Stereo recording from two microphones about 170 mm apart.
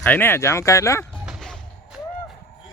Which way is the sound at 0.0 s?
10° left (ahead or behind).